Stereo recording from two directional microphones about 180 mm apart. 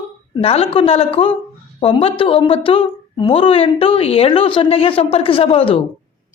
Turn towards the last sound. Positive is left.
turn(degrees=30)  # may be behind; listen again after turning